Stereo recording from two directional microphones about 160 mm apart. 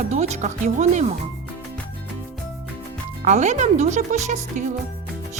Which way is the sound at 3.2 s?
45° right (ahead or behind).